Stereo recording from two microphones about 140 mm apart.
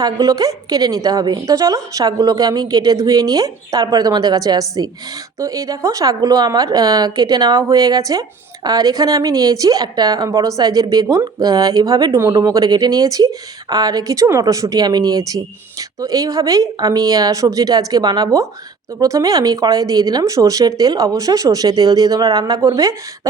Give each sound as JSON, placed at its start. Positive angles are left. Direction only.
{"t": 0.0, "sound": "speech", "side_deg": -25}